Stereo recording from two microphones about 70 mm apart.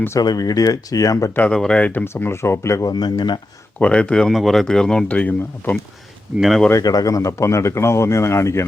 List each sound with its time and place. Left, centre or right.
0.2 s speech: left
1.4 s speech: centre
1.9 s speech: left
2.3 s speech: left
2.8 s speech: left
3.8 s speech: centre
6.7 s speech: left